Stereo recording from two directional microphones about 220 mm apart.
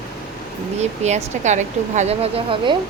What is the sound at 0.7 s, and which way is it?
Speech, 30° right (ahead or behind).